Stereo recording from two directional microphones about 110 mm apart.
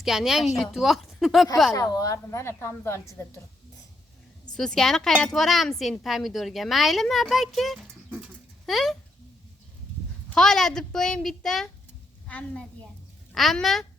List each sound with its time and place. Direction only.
0.0 s speech: 5° right (ahead or behind)
1.7 s a woman's voice: 30° left (ahead or behind)
4.5 s speech: 5° left (ahead or behind)
8.1 s a sound: centre (ahead or behind)
10.2 s a woman's voice: 5° left (ahead or behind)
13.3 s speech: centre (ahead or behind)